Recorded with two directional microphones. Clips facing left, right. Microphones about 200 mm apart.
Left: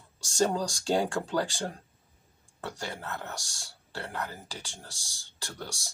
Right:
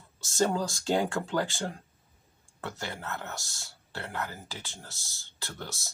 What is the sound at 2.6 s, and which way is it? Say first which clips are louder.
Speech: even; 15° left (ahead or behind).